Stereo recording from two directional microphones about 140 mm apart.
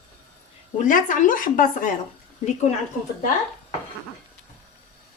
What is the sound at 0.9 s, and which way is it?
Speech, 75° left (ahead or behind).